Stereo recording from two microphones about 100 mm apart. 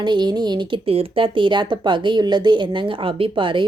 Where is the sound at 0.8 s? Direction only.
70° right (ahead or behind).